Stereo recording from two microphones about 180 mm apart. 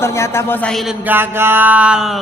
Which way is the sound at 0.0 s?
15° left (ahead or behind).